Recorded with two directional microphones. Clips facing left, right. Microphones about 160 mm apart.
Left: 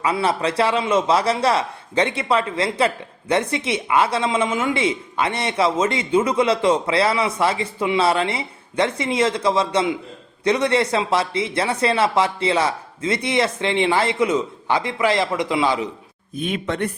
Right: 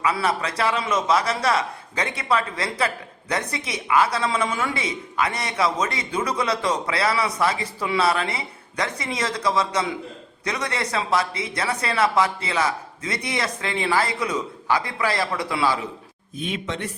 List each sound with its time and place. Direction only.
0.0 s a man's voice: 30° left (ahead or behind)
16.4 s speech: 55° left (ahead or behind)